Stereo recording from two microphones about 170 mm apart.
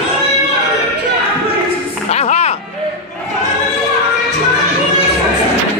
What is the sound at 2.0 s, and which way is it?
Music, 40° left (ahead or behind).